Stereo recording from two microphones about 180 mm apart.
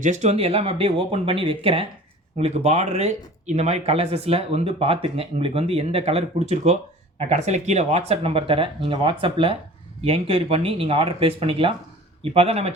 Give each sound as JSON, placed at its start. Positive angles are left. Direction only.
{"t": 0.0, "sound": "speech", "side_deg": -40}